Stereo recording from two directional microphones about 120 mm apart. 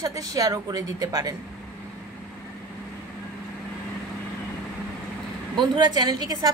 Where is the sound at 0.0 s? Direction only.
30° right (ahead or behind).